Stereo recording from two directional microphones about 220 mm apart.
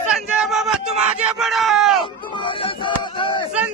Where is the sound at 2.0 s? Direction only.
20° left (ahead or behind).